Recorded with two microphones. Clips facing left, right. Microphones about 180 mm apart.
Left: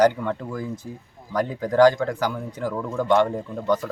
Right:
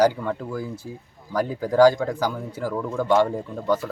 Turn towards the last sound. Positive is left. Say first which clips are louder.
# even
turn(degrees=-5)  # may be behind; listen again after turning